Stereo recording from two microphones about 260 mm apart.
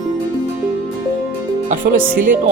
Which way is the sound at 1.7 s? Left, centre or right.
Right.